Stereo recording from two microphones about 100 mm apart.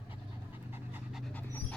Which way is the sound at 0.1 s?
20° right (ahead or behind).